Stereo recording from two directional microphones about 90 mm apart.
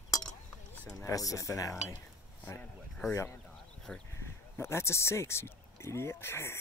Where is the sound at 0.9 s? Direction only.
40° left (ahead or behind).